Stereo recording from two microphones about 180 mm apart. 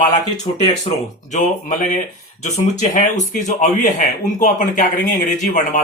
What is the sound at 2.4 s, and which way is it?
Speech, 45° left (ahead or behind).